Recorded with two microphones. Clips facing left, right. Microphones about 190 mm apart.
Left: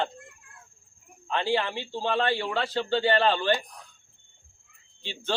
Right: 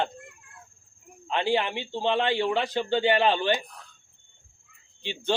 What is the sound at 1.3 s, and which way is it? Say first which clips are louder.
Speech: right 1 dB; 20° right (ahead or behind).